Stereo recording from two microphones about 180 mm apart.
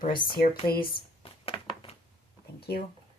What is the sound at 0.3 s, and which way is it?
Speech, 55° left (ahead or behind).